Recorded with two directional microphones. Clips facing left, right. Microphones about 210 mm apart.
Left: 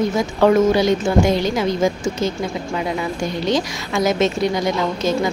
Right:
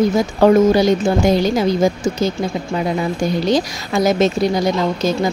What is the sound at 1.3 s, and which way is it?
Speech, 35° right (ahead or behind).